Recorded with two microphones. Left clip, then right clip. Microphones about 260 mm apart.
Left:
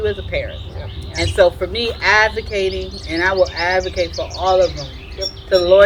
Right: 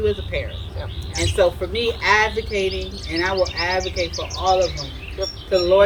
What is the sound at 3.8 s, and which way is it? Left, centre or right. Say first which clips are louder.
Speech: left 4 dB; right.